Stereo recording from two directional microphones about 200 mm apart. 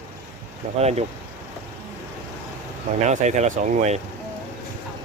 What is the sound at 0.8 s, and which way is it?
Speech, 30° right (ahead or behind).